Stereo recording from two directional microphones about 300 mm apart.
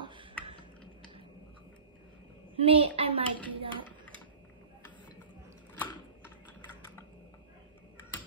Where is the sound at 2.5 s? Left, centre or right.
Centre.